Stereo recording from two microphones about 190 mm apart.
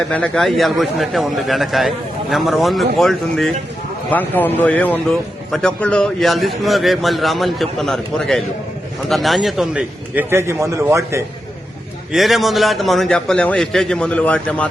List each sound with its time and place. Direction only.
0.1 s a man's voice: 5° left (ahead or behind); by 11.2 s 15° right (ahead or behind)
12.1 s a man's voice: centre (ahead or behind)